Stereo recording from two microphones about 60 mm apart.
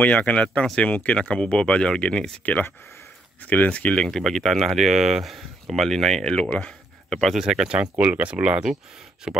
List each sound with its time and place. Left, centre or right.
0.0 s speech: left
2.4 s speech: left; by 7.3 s centre
7.3 s speech: centre
7.9 s speech: right